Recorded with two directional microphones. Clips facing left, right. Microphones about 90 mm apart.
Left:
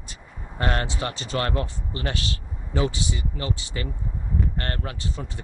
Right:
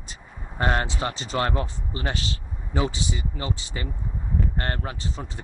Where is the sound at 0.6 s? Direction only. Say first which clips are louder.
Right 2 dB; 25° right (ahead or behind).